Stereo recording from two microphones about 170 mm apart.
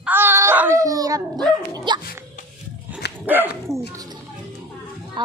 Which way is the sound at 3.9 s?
20° right (ahead or behind).